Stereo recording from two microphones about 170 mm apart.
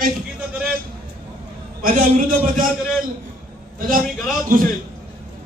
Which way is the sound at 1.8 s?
55° right (ahead or behind).